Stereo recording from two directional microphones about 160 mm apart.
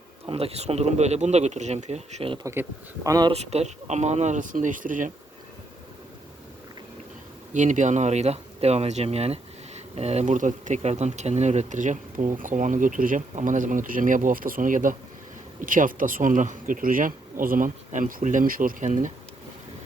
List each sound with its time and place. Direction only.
0.3 s speech: 40° right (ahead or behind)
2.4 s speech: 20° right (ahead or behind)
3.3 s speech: 40° right (ahead or behind)
7.5 s speech: 50° right (ahead or behind)